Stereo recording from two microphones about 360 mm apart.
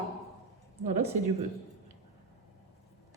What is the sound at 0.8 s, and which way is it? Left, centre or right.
Speech, right.